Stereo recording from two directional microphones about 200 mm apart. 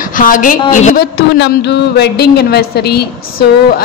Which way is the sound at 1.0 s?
55° left (ahead or behind).